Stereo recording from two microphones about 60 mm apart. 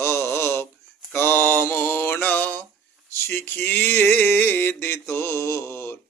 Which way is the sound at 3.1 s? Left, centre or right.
Left.